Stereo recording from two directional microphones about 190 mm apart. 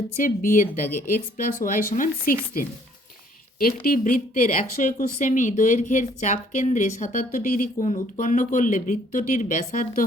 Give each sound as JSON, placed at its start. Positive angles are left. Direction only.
{"t": 0.2, "sound": "a woman's voice", "side_deg": 45}